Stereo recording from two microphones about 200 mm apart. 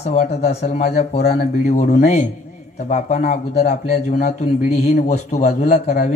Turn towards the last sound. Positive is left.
turn(degrees=35)  # may be behind; listen again after turning